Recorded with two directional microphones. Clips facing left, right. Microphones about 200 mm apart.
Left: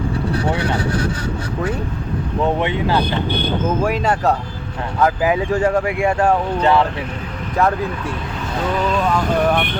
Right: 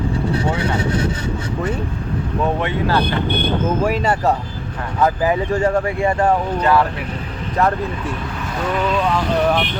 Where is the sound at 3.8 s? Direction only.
5° right (ahead or behind).